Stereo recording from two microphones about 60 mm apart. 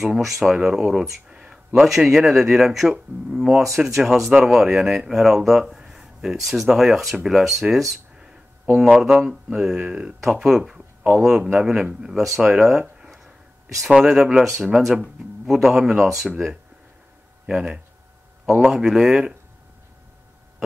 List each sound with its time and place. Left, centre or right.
0.0 s speech: centre
9.0 s speech: centre
13.0 s a sound: centre
13.8 s speech: centre
17.5 s speech: centre